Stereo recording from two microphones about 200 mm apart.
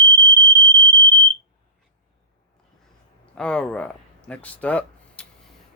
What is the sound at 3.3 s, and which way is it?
Speech, 5° left (ahead or behind).